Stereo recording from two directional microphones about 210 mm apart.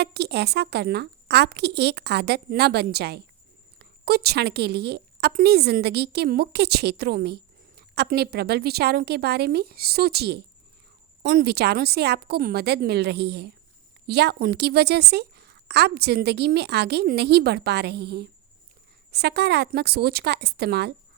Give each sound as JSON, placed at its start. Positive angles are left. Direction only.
{"t": 0.0, "sound": "a woman's voice", "side_deg": -50}